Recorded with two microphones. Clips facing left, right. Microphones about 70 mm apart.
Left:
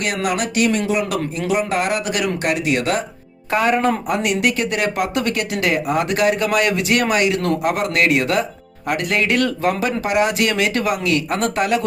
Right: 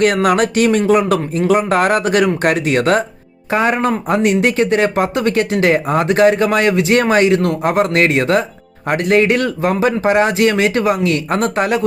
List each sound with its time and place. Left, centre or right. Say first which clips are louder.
0.0 s speech: right 8 dB; right
3.5 s speech: right 2 dB; right